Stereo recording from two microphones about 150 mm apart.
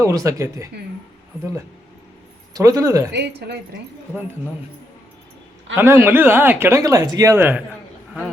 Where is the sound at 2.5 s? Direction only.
25° right (ahead or behind).